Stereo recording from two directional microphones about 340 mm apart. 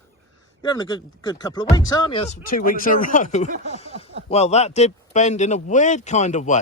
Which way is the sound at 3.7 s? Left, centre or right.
Centre.